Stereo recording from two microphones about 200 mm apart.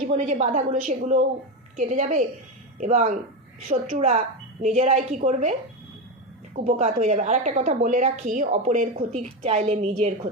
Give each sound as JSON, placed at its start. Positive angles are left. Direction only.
{"t": 0.1, "sound": "a woman's voice", "side_deg": -35}